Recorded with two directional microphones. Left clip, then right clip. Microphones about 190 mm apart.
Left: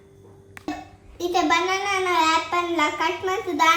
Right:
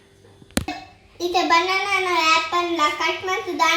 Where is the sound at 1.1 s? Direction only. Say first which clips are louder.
Right 3 dB; 20° right (ahead or behind).